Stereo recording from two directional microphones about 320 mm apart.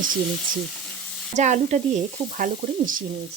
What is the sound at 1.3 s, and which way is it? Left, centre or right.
Speech, right.